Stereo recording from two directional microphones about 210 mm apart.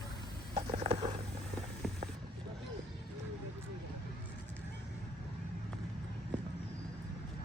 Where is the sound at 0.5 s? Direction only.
30° right (ahead or behind).